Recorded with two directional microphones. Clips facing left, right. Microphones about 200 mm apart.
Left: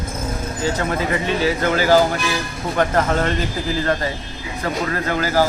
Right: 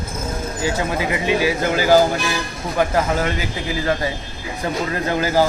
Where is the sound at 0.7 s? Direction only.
15° right (ahead or behind).